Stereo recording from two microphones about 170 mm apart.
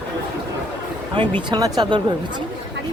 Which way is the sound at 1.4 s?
25° right (ahead or behind).